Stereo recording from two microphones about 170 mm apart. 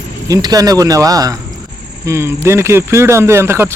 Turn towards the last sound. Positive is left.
turn(degrees=-15)  # may be behind; listen again after turning